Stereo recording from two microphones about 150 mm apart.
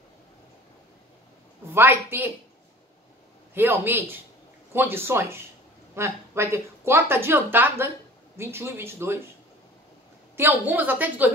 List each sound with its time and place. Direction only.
1.7 s speech: 15° right (ahead or behind)
3.5 s speech: 15° right (ahead or behind)
10.3 s speech: 15° right (ahead or behind)